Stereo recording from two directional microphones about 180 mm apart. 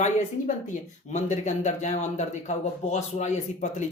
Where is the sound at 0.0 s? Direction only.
40° left (ahead or behind).